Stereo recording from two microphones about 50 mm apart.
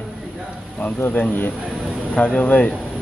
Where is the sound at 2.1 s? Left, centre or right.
Left.